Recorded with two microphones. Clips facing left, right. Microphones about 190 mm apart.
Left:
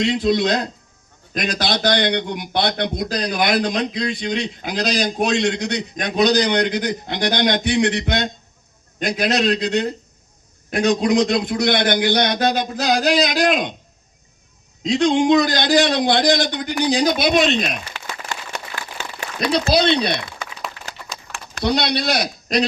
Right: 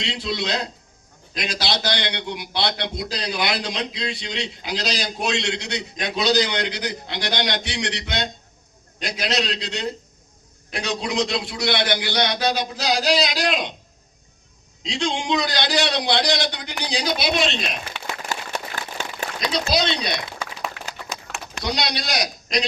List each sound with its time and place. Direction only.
0.0 s a man's voice: 50° left (ahead or behind)
14.8 s a man's voice: 50° left (ahead or behind)
19.4 s speech: 55° left (ahead or behind)
21.6 s speech: 55° left (ahead or behind)